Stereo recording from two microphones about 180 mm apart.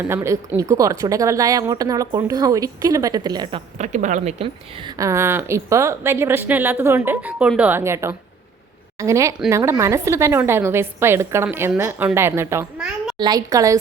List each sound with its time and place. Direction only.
0.1 s speech: 15° right (ahead or behind)
3.8 s speech: 40° right (ahead or behind); by 13.7 s 20° right (ahead or behind)